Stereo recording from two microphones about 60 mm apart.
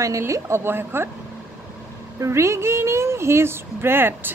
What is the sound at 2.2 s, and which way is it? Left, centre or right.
A woman's voice, right.